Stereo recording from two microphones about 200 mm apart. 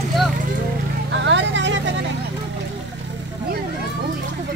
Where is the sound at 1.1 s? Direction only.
65° right (ahead or behind).